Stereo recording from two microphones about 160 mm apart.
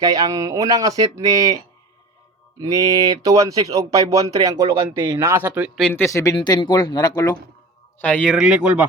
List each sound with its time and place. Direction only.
0.0 s speech: 20° right (ahead or behind)
2.6 s speech: 20° right (ahead or behind)
5.2 s speech: 15° right (ahead or behind)
5.8 s speech: 15° left (ahead or behind)
7.9 s speech: 10° left (ahead or behind)